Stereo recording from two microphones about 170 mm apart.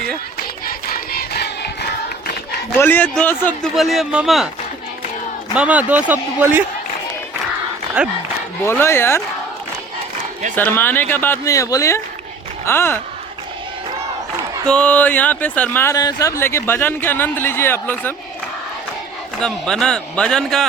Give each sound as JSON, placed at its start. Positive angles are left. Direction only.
{"t": 0.3, "sound": "a sound", "side_deg": 60}
{"t": 2.7, "sound": "a man's voice", "side_deg": 10}
{"t": 5.5, "sound": "a man's voice", "side_deg": -10}
{"t": 8.6, "sound": "speech", "side_deg": 15}
{"t": 10.5, "sound": "speech", "side_deg": 10}
{"t": 14.7, "sound": "speech", "side_deg": 5}
{"t": 19.4, "sound": "a man's voice", "side_deg": 5}